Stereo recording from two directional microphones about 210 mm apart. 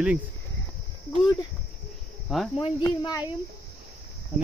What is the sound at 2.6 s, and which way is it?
Speech, 20° left (ahead or behind).